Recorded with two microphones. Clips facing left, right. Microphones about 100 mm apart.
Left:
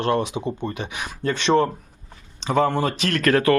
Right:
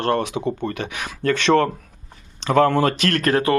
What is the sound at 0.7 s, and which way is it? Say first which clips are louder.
Speech: right 2 dB; 80° right.